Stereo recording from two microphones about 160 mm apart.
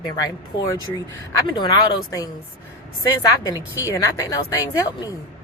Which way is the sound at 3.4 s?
20° left (ahead or behind).